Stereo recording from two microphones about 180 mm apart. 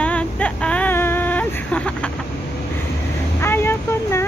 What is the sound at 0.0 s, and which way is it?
Vehicle, 5° left (ahead or behind).